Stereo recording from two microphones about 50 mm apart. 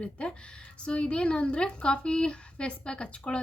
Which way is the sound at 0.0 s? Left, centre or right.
Left.